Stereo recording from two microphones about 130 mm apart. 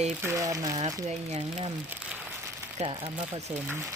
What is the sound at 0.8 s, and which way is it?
Speech, 60° right (ahead or behind).